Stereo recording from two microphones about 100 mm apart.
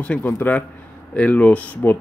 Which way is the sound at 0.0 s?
15° left (ahead or behind).